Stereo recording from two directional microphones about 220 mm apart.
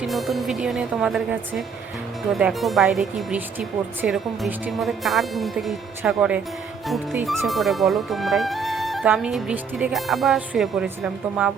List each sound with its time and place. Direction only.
0.0 s speech: centre (ahead or behind)